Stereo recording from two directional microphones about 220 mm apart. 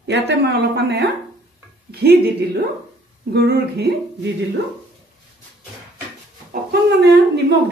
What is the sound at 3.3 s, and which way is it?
A man's voice, 50° right (ahead or behind).